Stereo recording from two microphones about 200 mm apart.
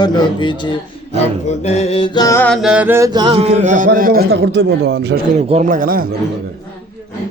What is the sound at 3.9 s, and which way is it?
A man's voice, 50° right (ahead or behind).